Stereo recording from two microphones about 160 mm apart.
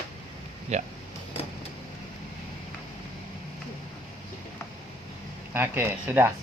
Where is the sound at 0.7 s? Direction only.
45° right (ahead or behind).